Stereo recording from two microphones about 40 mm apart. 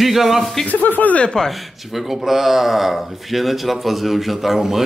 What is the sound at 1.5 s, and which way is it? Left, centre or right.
Speech, centre.